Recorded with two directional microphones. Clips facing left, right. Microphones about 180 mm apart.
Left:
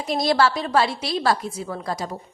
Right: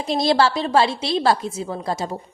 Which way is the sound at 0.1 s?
25° right (ahead or behind).